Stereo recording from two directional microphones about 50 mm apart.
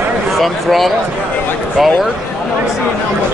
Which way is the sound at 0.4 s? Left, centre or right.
Centre.